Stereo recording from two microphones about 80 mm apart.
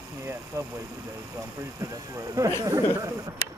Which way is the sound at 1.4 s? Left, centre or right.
Right.